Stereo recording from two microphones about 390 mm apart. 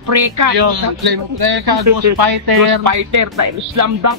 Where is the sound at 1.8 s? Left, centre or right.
Right.